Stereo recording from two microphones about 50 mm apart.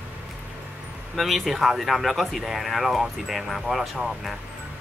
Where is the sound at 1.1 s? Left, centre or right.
Centre.